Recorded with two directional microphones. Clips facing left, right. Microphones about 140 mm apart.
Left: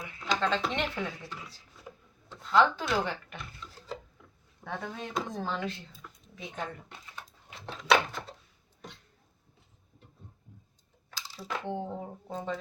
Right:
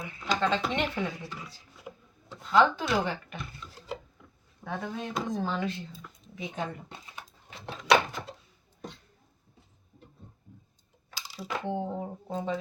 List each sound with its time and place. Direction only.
0.3 s speech: 10° right (ahead or behind)
2.9 s a sound: 5° right (ahead or behind)
3.7 s wood: 15° right (ahead or behind)
4.2 s drawer open or close: 5° right (ahead or behind)
5.4 s speech: 5° right (ahead or behind)
6.0 s a sound: 5° right (ahead or behind)
6.8 s a sound: 20° right (ahead or behind)
7.7 s door: centre (ahead or behind)
11.3 s speech: 10° right (ahead or behind)